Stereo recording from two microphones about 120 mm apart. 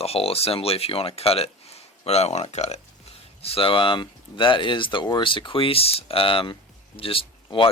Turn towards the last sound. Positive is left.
turn(degrees=45)  # may be behind; listen again after turning